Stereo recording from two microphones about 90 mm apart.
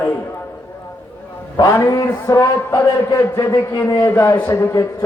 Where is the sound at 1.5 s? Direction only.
35° left (ahead or behind).